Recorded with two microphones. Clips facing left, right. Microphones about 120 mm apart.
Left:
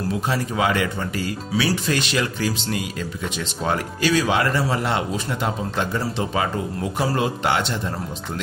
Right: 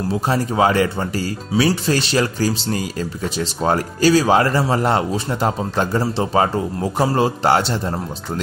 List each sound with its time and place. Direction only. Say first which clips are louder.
0.1 s speech: right 6 dB; 35° right (ahead or behind)